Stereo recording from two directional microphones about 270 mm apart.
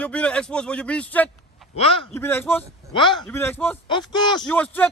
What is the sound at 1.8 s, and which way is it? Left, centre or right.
Speech, left.